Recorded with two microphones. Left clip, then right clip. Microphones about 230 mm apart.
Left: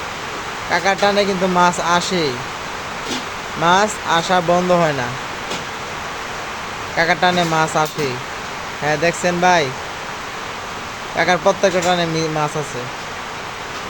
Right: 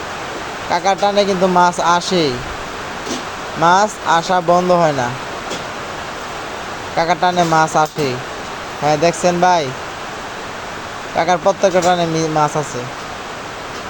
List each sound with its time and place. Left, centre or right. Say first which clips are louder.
0.7 s speech: right 1 dB; centre
3.6 s speech: right 2 dB; centre
6.9 s speech: right 1 dB; centre
11.2 s speech: right 1 dB; centre